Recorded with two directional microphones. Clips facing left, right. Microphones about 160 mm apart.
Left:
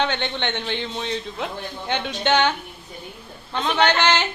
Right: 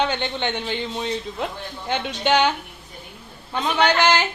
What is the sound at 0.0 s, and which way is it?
A man's voice, 5° right (ahead or behind).